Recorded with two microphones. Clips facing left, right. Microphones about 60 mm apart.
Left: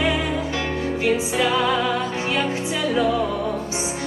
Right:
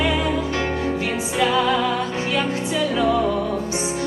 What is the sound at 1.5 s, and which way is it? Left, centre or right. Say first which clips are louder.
Music: right 1 dB; left.